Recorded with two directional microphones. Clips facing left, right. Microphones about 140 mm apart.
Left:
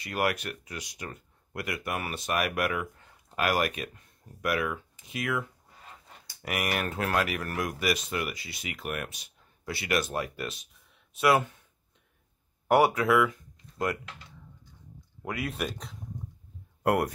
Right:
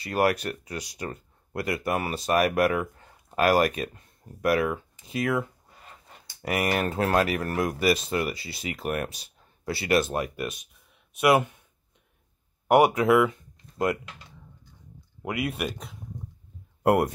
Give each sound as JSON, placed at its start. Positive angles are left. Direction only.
{"t": 0.0, "sound": "speech", "side_deg": -35}
{"t": 12.6, "sound": "speech", "side_deg": -15}
{"t": 15.2, "sound": "speech", "side_deg": -10}
{"t": 16.8, "sound": "speech", "side_deg": -25}